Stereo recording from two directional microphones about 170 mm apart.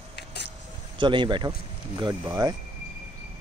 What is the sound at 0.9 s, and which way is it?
Speech, 30° right (ahead or behind).